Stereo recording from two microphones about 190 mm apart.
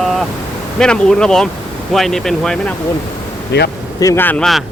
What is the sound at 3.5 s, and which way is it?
Speech, 60° left (ahead or behind).